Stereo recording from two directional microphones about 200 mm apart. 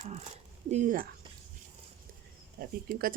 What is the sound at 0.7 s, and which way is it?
Speech, 40° right (ahead or behind).